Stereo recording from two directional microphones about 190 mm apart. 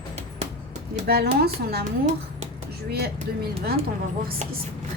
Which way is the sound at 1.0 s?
55° right (ahead or behind).